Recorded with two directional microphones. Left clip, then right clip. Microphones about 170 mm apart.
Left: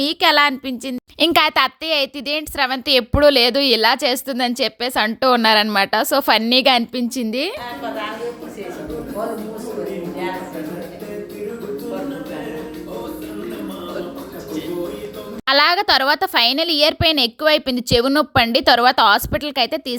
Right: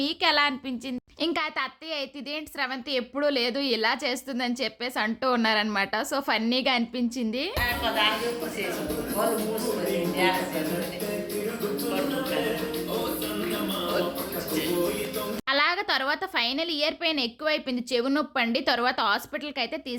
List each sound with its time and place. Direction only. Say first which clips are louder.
0.0 s a woman's voice: left 9 dB; 40° left (ahead or behind)
1.3 s a woman's voice: left 14 dB; 55° left (ahead or behind)
15.4 s a woman's voice: left 11 dB; 45° left (ahead or behind)